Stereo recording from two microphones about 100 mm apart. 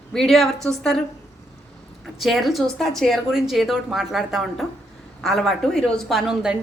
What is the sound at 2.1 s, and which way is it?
A woman's voice, centre (ahead or behind).